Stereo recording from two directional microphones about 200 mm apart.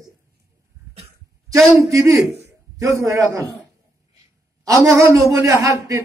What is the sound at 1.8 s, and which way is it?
Speech, 15° right (ahead or behind).